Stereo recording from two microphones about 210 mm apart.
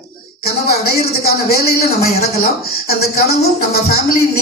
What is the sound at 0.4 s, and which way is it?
Speech, 45° left (ahead or behind).